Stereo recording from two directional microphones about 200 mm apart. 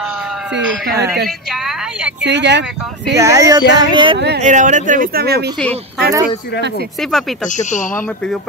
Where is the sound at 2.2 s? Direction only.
60° right (ahead or behind).